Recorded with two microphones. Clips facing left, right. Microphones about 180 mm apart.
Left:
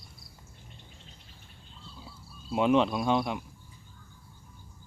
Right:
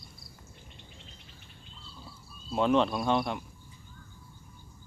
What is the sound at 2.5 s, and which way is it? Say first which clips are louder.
Speech: left 1 dB; 5° left (ahead or behind).